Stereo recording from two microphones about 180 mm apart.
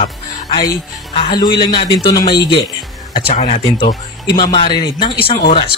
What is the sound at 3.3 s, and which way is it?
Speech, 40° left (ahead or behind).